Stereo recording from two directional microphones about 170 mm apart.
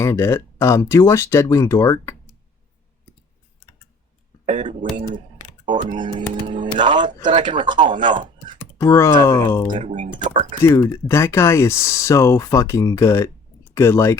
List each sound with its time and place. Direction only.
0.0 s speech: 15° left (ahead or behind)
4.5 s speech: 45° right (ahead or behind)
6.4 s speech: 30° right (ahead or behind)
8.8 s speech: 15° left (ahead or behind)